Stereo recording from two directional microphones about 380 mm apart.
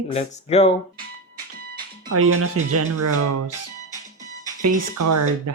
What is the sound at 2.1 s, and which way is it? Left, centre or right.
Speech, right.